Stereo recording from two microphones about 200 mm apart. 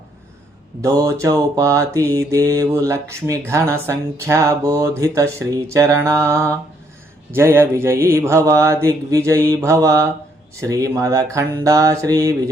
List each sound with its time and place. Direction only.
0.8 s mantra: 15° right (ahead or behind)